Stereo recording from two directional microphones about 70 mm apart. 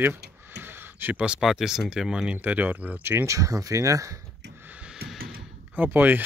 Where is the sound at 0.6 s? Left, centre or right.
Right.